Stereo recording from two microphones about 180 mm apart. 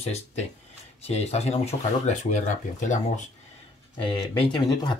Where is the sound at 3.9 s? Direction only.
25° left (ahead or behind).